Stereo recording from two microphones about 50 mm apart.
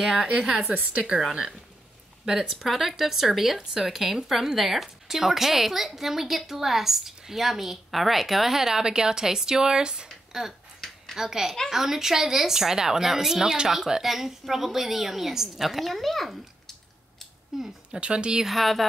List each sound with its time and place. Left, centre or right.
0.0 s a woman's voice: centre
2.2 s a woman's voice: centre
17.5 s a woman's voice: centre
18.0 s speech: right
18.4 s speech: centre